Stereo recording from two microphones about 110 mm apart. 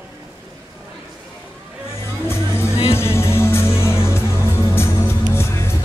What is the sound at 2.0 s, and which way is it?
Music, 25° left (ahead or behind).